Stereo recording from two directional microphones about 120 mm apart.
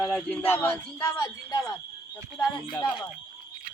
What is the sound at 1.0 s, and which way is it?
Speech, 25° left (ahead or behind).